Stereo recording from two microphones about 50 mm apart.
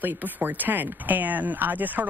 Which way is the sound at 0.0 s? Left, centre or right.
Right.